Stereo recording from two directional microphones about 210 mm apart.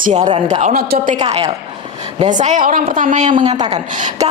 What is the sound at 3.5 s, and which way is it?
Speech, 20° right (ahead or behind).